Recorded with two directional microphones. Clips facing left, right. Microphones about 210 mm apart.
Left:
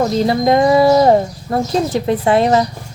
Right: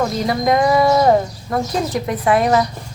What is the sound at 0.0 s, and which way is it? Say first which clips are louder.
Speech: left 4 dB; 30° left (ahead or behind).